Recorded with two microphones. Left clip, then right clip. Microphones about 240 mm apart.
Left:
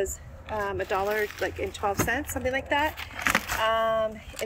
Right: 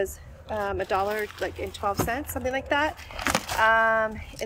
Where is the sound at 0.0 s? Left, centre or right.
Centre.